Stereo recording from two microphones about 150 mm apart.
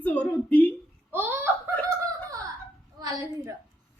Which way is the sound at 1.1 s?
15° right (ahead or behind).